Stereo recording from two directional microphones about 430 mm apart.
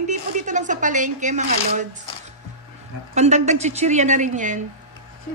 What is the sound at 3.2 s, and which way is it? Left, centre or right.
A woman's voice, centre.